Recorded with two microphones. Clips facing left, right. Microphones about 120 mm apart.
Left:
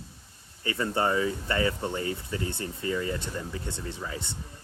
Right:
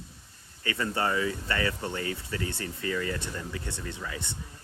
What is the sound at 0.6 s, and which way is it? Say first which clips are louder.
Speech: left 2 dB; 25° left (ahead or behind).